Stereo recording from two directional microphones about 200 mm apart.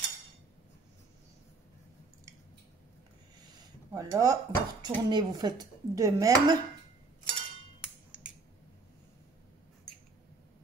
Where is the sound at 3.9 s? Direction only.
15° right (ahead or behind).